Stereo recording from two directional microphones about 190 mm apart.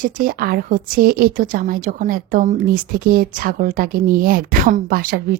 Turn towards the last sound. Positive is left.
turn(degrees=-50)  # may be behind; listen again after turning